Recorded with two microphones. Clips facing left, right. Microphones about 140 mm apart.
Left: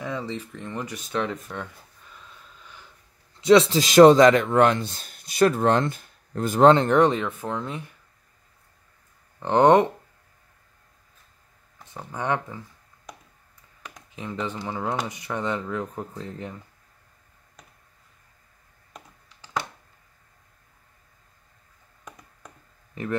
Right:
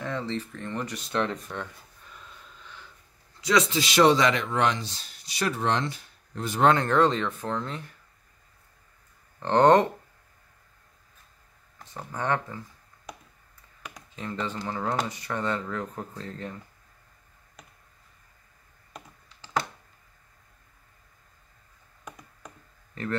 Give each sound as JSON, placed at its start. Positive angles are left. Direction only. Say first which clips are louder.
{"t": 0.0, "sound": "speech", "louder": "even", "side_deg": 10}
{"t": 1.0, "sound": "a sound", "louder": "left 1 dB", "side_deg": 5}
{"t": 3.3, "sound": "speech", "louder": "left 8 dB", "side_deg": 25}
{"t": 3.8, "sound": "speech", "louder": "left 8 dB", "side_deg": 45}
{"t": 6.6, "sound": "speech", "louder": "left 5 dB", "side_deg": 25}
{"t": 9.4, "sound": "speech", "louder": "left 2 dB", "side_deg": 15}
{"t": 12.0, "sound": "speech", "louder": "left 1 dB", "side_deg": 15}
{"t": 13.1, "sound": "a sound", "louder": "right 1 dB", "side_deg": 0}
{"t": 14.1, "sound": "speech", "louder": "left 2 dB", "side_deg": 15}
{"t": 17.6, "sound": "a sound", "louder": "right 1 dB", "side_deg": 0}
{"t": 23.0, "sound": "speech", "louder": "left 1 dB", "side_deg": 15}